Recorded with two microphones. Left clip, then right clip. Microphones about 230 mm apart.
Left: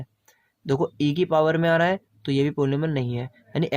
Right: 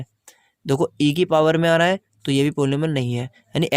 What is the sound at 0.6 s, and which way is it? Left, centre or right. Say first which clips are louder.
Speech: right 4 dB; right.